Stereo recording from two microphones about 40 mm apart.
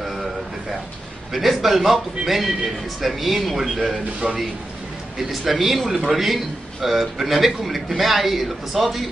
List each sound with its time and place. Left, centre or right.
0.0 s a sound: centre
1.3 s a man's voice: centre
4.2 s a man's voice: right
5.5 s a man's voice: centre